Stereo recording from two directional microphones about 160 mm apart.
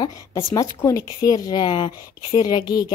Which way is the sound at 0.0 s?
20° left (ahead or behind).